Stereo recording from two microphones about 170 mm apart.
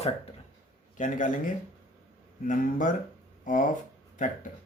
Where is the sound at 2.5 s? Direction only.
55° left (ahead or behind).